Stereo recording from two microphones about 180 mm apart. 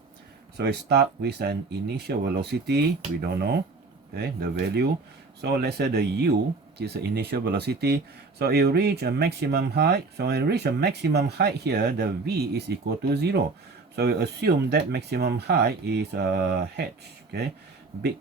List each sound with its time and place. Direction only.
0.5 s speech: 65° right (ahead or behind)